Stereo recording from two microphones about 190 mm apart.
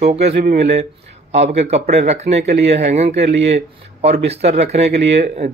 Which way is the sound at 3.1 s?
65° right (ahead or behind).